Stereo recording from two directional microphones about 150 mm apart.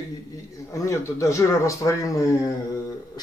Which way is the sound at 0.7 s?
20° left (ahead or behind).